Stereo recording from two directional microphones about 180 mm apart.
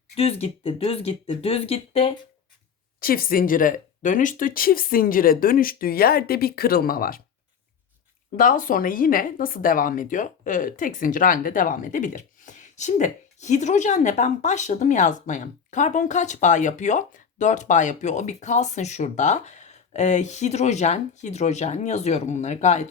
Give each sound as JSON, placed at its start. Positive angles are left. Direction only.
{"t": 0.2, "sound": "speech", "side_deg": 35}
{"t": 3.0, "sound": "speech", "side_deg": 55}
{"t": 8.4, "sound": "speech", "side_deg": 50}